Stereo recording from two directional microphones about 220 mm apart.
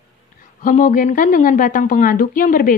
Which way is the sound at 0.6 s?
40° left (ahead or behind).